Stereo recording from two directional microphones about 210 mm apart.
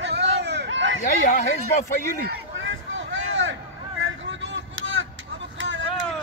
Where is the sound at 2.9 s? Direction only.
65° right (ahead or behind).